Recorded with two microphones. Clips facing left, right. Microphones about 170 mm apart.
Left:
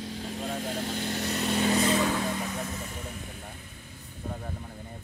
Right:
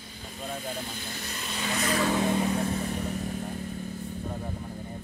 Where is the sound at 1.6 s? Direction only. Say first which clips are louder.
Left 4 dB; 30° left (ahead or behind).